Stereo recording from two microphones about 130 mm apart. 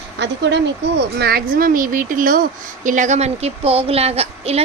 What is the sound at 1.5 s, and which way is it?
Speech, 90° right.